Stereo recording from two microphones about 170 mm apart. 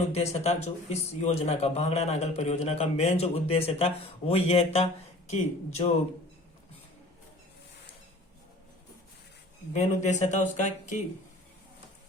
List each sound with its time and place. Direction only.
0.1 s speech: 40° left (ahead or behind)
9.7 s speech: 45° left (ahead or behind)